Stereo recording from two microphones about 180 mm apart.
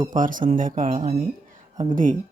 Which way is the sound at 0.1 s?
45° right (ahead or behind).